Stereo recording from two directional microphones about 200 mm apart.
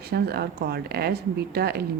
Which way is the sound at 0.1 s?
50° right (ahead or behind).